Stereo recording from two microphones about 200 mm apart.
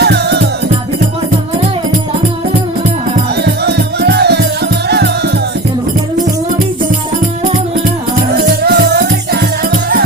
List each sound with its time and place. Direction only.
0.0 s music: 55° right (ahead or behind)
3.4 s music: 55° right (ahead or behind)
8.4 s music: 50° right (ahead or behind)